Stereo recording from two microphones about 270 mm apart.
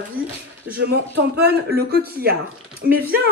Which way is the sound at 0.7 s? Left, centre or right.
Right.